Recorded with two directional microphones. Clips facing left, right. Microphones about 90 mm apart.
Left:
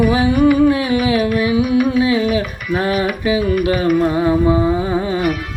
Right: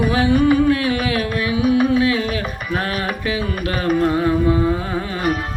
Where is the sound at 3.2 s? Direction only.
20° left (ahead or behind).